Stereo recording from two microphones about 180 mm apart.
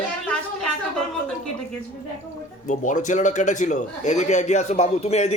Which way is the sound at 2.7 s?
45° left (ahead or behind).